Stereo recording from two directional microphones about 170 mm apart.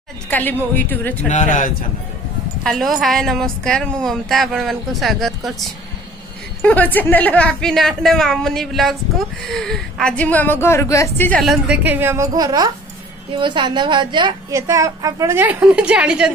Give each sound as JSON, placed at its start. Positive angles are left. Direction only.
{"t": 0.3, "sound": "a woman's voice", "side_deg": 10}
{"t": 1.3, "sound": "a man's voice", "side_deg": 45}
{"t": 2.6, "sound": "a woman's voice", "side_deg": 0}
{"t": 11.4, "sound": "a woman's voice", "side_deg": -5}